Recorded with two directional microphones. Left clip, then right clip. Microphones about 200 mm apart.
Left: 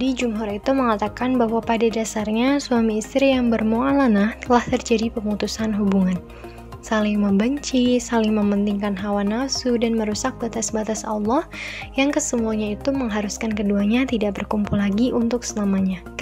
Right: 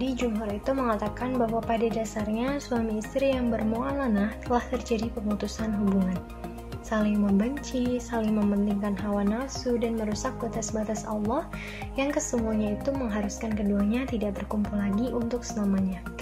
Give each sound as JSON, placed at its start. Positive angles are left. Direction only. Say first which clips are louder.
{"t": 0.0, "sound": "speech", "louder": "left 6 dB", "side_deg": 50}